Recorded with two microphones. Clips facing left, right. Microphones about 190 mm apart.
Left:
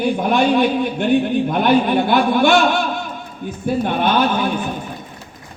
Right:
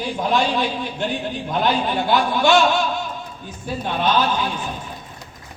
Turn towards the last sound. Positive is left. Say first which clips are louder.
# left 3 dB
turn(degrees=55)  # may be behind; listen again after turning